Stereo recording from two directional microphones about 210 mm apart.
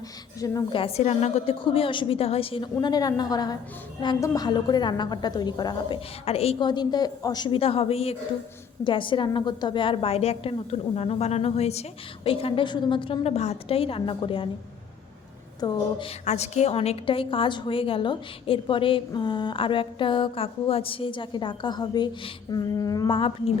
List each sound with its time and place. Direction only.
0.3 s a woman's voice: 15° left (ahead or behind)
15.6 s a woman's voice: 25° left (ahead or behind)